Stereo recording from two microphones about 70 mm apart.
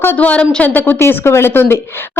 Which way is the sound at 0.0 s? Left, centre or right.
Left.